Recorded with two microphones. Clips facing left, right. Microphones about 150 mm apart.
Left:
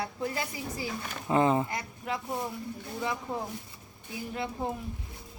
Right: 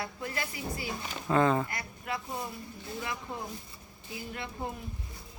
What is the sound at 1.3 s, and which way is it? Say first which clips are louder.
Speech: left 1 dB; 20° left (ahead or behind).